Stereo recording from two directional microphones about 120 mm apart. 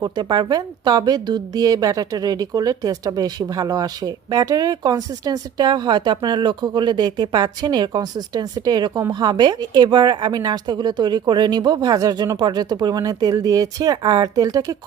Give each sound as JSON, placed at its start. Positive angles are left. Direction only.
{"t": 0.0, "sound": "a woman's voice", "side_deg": -35}